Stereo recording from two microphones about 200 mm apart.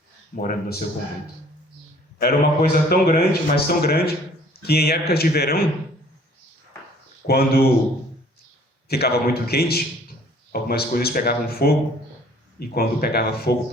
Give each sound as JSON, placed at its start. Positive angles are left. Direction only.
{"t": 0.3, "sound": "a man's voice", "side_deg": 45}
{"t": 2.1, "sound": "a man's voice", "side_deg": 50}
{"t": 7.3, "sound": "a man's voice", "side_deg": 50}
{"t": 8.9, "sound": "a man's voice", "side_deg": 50}